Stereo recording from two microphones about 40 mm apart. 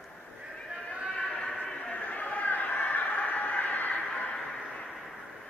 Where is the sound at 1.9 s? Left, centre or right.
Left.